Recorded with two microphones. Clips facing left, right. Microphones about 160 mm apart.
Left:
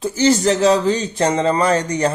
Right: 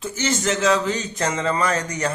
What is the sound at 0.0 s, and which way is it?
Speech, 35° left (ahead or behind).